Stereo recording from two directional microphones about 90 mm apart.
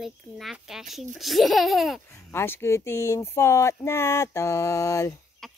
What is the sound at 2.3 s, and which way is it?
Speech, 25° left (ahead or behind).